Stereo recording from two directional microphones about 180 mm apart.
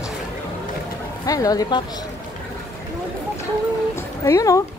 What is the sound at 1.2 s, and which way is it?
Speech, 20° left (ahead or behind).